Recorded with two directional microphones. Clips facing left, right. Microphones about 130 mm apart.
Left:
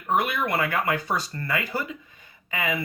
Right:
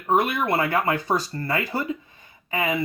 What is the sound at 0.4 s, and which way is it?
Speech, 30° right (ahead or behind).